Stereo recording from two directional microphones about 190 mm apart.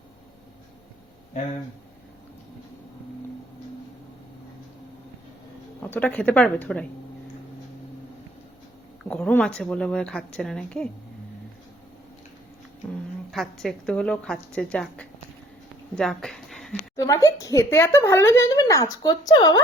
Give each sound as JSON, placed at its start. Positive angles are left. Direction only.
{"t": 5.8, "sound": "speech", "side_deg": 10}
{"t": 9.0, "sound": "a woman's voice", "side_deg": 5}
{"t": 13.3, "sound": "a woman's voice", "side_deg": 0}
{"t": 16.0, "sound": "a sound", "side_deg": 5}
{"t": 17.0, "sound": "speech", "side_deg": 15}